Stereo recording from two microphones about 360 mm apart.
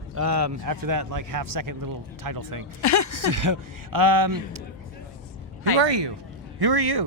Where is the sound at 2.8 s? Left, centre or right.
Left.